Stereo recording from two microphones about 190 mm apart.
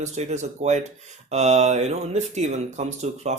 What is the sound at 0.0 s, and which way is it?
Speech, 35° right (ahead or behind).